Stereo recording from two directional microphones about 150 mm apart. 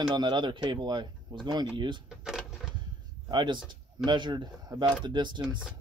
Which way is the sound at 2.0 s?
Centre (ahead or behind).